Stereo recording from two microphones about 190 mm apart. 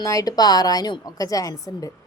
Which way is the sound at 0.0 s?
15° left (ahead or behind).